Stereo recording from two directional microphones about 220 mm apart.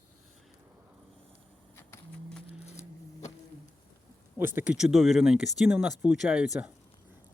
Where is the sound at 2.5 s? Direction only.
30° left (ahead or behind).